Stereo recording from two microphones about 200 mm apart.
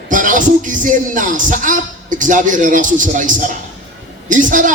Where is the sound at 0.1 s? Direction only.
40° right (ahead or behind).